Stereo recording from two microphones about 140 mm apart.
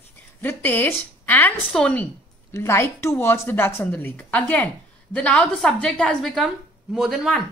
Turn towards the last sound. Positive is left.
turn(degrees=0)  # may be behind; listen again after turning